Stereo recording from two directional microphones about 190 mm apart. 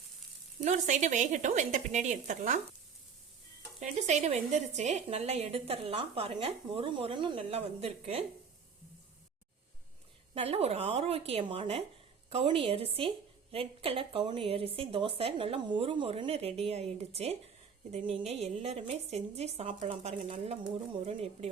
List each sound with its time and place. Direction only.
0.6 s a woman's voice: 40° right (ahead or behind)
3.8 s a woman's voice: 40° right (ahead or behind)
10.3 s a woman's voice: 30° right (ahead or behind)